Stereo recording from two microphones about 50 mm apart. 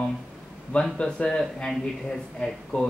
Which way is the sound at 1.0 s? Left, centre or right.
Centre.